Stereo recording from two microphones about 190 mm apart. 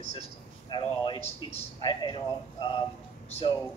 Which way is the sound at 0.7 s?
25° left (ahead or behind).